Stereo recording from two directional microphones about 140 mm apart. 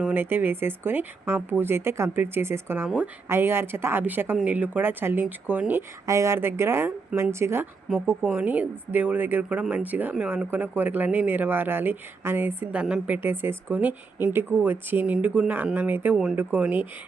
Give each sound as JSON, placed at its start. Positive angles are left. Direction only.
{"t": 0.0, "sound": "speech", "side_deg": -15}